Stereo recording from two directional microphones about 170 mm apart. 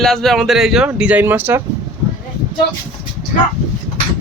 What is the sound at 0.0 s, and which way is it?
Speech, centre (ahead or behind).